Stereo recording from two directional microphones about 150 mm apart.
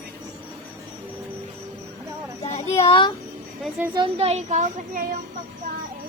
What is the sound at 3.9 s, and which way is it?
Speech, 40° right (ahead or behind).